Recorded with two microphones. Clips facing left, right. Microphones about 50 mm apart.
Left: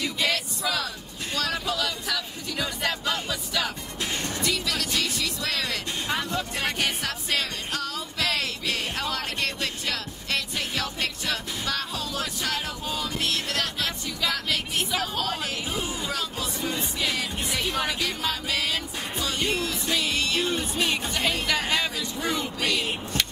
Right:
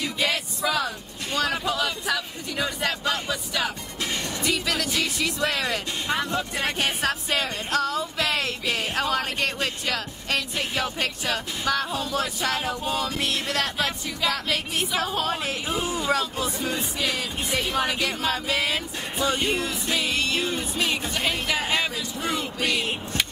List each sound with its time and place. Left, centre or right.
0.0 s vehicle: centre
3.1 s speech: centre
7.8 s music: centre
9.0 s speech: centre
20.5 s speech: centre